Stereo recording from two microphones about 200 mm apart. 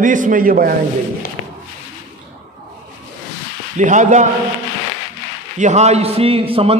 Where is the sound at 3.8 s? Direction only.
40° right (ahead or behind).